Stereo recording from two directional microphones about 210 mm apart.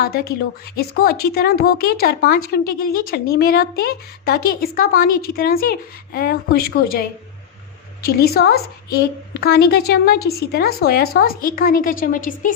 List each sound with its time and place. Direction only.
0.0 s a woman's voice: 45° left (ahead or behind)